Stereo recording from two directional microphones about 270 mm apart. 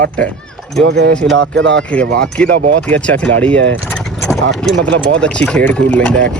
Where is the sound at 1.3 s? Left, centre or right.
Right.